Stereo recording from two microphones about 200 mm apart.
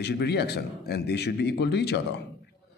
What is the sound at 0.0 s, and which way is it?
A man's voice, 55° left (ahead or behind).